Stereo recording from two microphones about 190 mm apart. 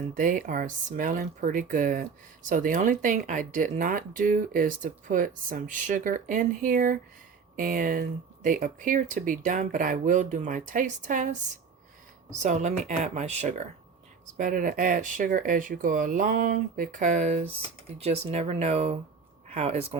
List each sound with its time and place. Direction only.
0.1 s speech: 45° right (ahead or behind)